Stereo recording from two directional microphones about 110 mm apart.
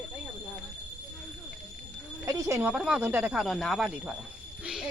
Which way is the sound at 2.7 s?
5° right (ahead or behind).